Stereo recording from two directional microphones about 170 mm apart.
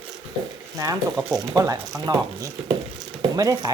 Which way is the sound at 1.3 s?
20° right (ahead or behind).